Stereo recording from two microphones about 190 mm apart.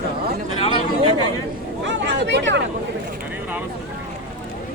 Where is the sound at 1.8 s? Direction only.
65° right (ahead or behind).